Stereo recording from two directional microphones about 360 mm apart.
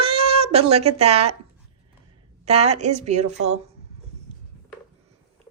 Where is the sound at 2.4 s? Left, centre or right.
Centre.